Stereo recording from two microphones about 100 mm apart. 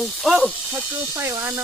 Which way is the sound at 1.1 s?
30° right (ahead or behind).